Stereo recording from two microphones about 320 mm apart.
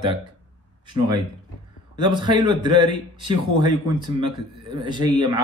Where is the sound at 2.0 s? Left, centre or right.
Centre.